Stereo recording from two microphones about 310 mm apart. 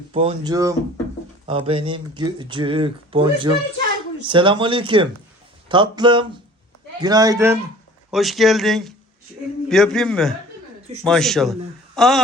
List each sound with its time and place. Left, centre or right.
0.1 s speech: centre